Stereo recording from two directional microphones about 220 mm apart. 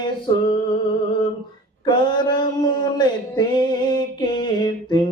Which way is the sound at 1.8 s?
20° left (ahead or behind).